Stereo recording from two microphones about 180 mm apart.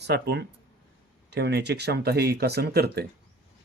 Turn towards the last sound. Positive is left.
turn(degrees=-60)  # may be behind; listen again after turning